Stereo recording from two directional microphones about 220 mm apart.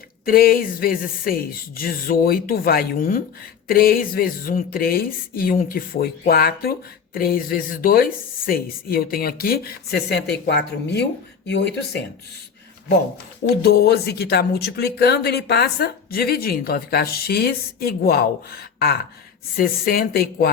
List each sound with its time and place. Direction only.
0.3 s speech: 40° left (ahead or behind)
13.7 s speech: 45° left (ahead or behind)